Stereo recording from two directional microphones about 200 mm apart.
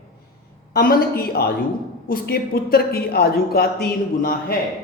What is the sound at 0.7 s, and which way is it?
Speech, 50° left (ahead or behind).